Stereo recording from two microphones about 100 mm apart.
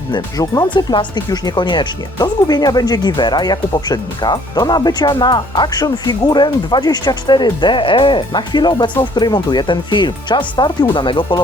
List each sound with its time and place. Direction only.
0.1 s speech: 40° left (ahead or behind)